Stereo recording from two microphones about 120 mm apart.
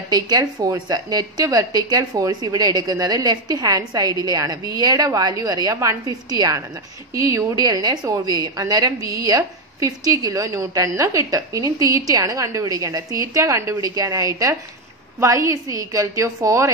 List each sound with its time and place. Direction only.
0.1 s a woman's voice: 35° right (ahead or behind)